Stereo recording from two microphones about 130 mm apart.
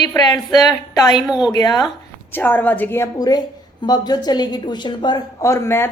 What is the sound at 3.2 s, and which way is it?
A woman's voice, 30° left (ahead or behind).